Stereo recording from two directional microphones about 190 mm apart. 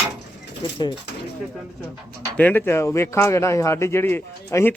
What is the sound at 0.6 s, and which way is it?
Speech, 25° left (ahead or behind).